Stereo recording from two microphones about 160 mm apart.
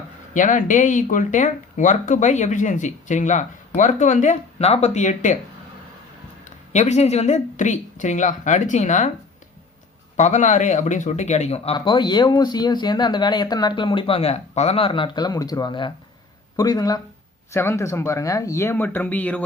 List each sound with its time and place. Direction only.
0.3 s speech: 55° left (ahead or behind)
6.7 s speech: 45° left (ahead or behind)
10.2 s speech: 45° left (ahead or behind); by 19.5 s 10° left (ahead or behind)